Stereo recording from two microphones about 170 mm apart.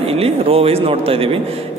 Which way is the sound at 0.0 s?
35° right (ahead or behind).